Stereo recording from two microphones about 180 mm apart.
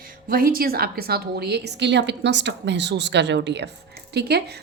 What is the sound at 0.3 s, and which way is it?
A woman's voice, 55° right (ahead or behind).